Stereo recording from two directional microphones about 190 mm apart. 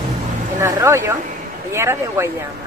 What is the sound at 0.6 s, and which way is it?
Speech, 15° right (ahead or behind).